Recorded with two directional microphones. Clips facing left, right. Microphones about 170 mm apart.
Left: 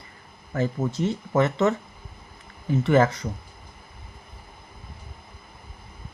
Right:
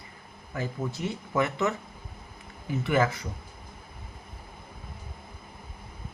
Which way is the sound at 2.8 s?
45° left (ahead or behind).